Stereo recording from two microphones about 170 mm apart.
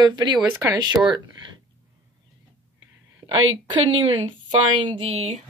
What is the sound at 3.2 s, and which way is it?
Speech, 25° right (ahead or behind).